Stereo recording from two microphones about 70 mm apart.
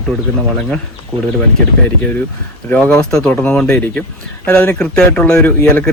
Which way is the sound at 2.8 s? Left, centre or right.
Centre.